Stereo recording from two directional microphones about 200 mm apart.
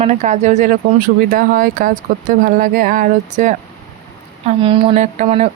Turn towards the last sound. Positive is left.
turn(degrees=-35)  # may be behind; listen again after turning